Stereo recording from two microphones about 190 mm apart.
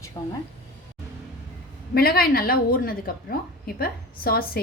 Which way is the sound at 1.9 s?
55° left (ahead or behind).